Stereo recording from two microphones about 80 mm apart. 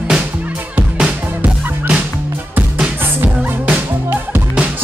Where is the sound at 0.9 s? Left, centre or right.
Centre.